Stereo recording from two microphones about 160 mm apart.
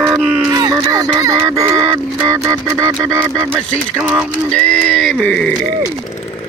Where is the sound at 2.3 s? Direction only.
20° right (ahead or behind).